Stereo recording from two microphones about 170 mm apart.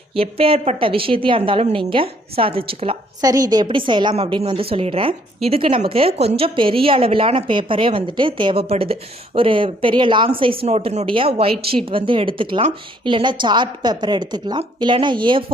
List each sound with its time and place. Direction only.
0.1 s a woman's voice: 35° right (ahead or behind)
3.2 s a woman's voice: 20° right (ahead or behind)
4.1 s a woman's voice: 40° right (ahead or behind)